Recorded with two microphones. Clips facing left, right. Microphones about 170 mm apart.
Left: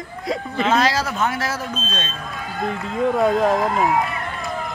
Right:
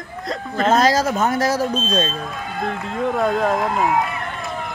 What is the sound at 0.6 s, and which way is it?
Speech, 45° right (ahead or behind).